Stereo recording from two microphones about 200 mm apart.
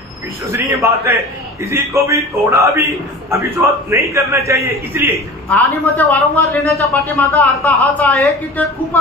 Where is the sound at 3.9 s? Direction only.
15° right (ahead or behind).